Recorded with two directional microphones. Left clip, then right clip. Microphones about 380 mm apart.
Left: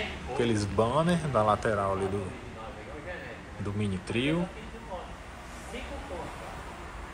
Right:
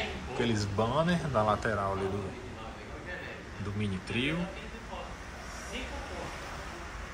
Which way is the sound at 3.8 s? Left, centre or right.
Centre.